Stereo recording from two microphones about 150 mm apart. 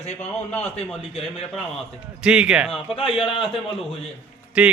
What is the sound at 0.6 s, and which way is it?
Speech, 40° left (ahead or behind).